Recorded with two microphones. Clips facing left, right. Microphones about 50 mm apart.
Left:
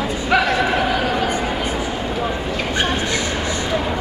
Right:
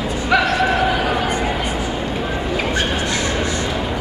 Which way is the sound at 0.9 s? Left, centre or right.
Centre.